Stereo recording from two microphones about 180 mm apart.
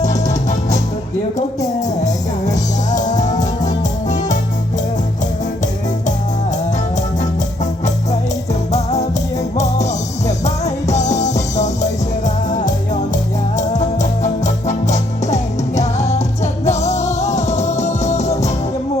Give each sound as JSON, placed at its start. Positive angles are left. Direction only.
{"t": 3.0, "sound": "music", "side_deg": 45}
{"t": 8.7, "sound": "music", "side_deg": 40}
{"t": 10.2, "sound": "music", "side_deg": 40}